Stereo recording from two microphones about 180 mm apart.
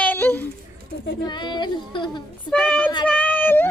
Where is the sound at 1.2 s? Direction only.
25° left (ahead or behind).